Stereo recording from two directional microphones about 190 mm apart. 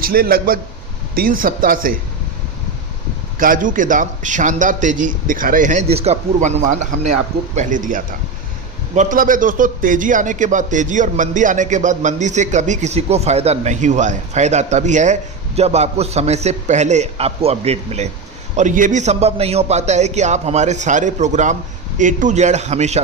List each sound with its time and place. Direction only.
0.0 s a man's voice: 50° right (ahead or behind)
3.3 s a man's voice: 45° right (ahead or behind)